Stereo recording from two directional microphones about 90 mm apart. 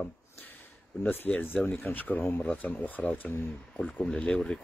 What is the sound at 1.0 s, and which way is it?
Speech, 20° left (ahead or behind).